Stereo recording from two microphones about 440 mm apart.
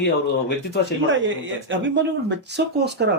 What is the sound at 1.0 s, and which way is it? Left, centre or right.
Speech, right.